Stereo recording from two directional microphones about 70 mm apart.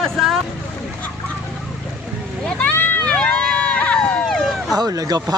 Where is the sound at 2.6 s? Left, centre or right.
Left.